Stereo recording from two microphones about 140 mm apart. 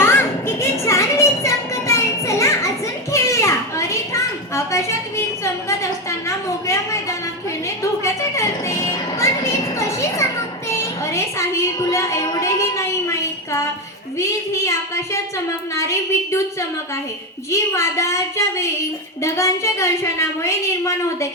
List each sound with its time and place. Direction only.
0.0 s child singing: 15° left (ahead or behind)
7.8 s music: 20° left (ahead or behind)
11.0 s a sound: 20° left (ahead or behind)
14.2 s a woman's voice: 20° left (ahead or behind)